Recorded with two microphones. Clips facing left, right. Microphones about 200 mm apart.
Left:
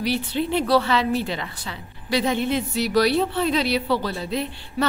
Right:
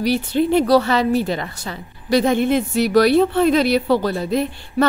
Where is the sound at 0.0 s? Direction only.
45° right (ahead or behind).